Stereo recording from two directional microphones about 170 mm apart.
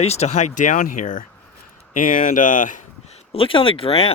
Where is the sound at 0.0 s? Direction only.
40° left (ahead or behind).